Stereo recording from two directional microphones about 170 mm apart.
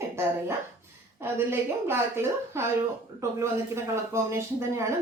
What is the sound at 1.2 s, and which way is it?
Speech, 15° right (ahead or behind).